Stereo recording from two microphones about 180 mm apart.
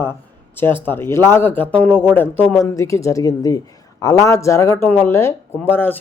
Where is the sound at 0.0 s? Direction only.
10° left (ahead or behind).